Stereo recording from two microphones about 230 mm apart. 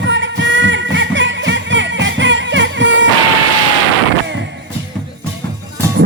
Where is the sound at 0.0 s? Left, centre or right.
Right.